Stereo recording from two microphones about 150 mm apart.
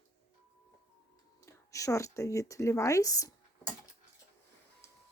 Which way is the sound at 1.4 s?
20° left (ahead or behind).